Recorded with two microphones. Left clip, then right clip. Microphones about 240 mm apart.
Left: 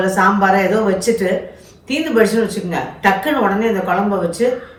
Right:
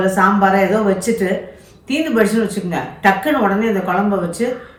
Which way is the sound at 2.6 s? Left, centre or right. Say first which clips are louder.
Right 3 dB; centre.